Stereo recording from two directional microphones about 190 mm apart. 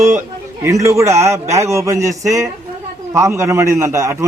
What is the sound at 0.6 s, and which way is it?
A man's voice, 15° right (ahead or behind).